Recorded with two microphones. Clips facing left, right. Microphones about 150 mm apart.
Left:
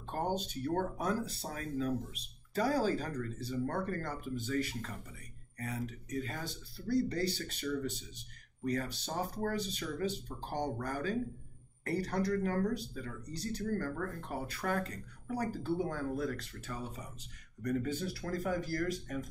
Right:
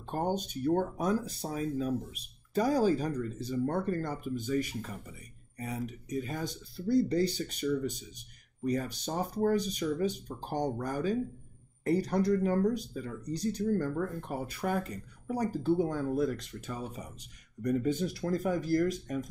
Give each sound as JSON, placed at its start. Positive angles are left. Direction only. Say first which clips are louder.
{"t": 0.1, "sound": "speech", "louder": "right 3 dB", "side_deg": -15}